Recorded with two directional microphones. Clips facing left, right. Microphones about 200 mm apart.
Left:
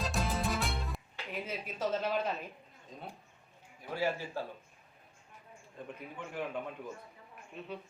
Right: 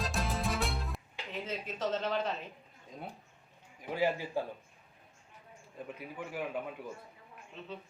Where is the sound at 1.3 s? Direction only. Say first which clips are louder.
Right 1 dB; 10° left (ahead or behind).